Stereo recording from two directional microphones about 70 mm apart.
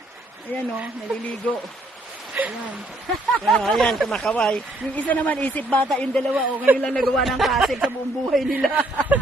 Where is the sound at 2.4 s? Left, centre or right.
Right.